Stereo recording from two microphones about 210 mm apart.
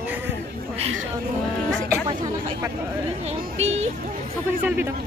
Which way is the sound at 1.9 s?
15° right (ahead or behind).